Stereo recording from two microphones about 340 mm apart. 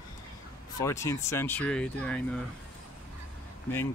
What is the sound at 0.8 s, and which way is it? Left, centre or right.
Speech, centre.